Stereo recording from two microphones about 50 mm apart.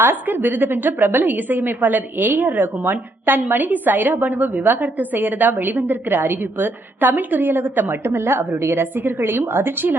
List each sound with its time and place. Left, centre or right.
0.0 s a woman's voice: right